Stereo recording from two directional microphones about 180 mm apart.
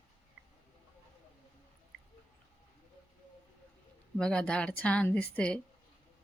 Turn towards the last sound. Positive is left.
turn(degrees=5)  # may be behind; listen again after turning